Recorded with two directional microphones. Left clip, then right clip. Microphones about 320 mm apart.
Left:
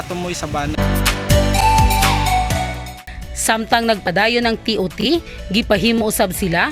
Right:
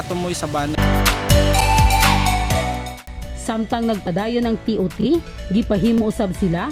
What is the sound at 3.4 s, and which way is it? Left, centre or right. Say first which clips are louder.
A woman's voice: left 6 dB; left.